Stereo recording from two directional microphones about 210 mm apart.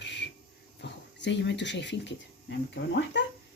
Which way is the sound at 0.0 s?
55° left (ahead or behind).